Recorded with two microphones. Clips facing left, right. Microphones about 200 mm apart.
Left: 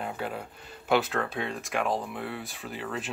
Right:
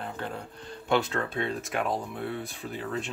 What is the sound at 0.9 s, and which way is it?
Speech, centre (ahead or behind).